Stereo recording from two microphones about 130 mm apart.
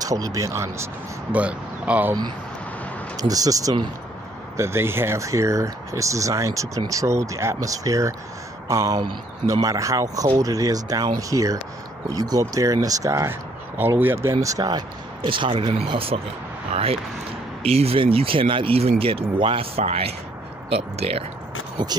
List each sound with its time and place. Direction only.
0.0 s speech: 30° right (ahead or behind)
1.3 s speech: 10° right (ahead or behind)
3.2 s speech: 25° right (ahead or behind); by 21.2 s 50° right (ahead or behind)
21.8 s speech: 35° right (ahead or behind)